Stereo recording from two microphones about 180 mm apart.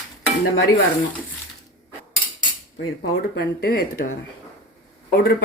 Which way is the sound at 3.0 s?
65° left (ahead or behind).